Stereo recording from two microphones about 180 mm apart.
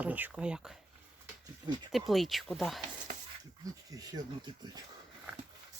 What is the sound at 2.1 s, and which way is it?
Speech, centre (ahead or behind).